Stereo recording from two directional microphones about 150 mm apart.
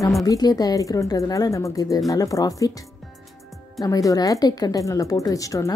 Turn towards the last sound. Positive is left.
turn(degrees=20)  # may be behind; listen again after turning